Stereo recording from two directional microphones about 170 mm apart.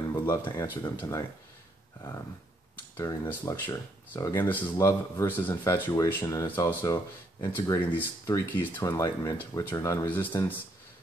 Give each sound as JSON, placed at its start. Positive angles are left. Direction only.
{"t": 0.1, "sound": "speech", "side_deg": 20}
{"t": 3.0, "sound": "speech", "side_deg": 15}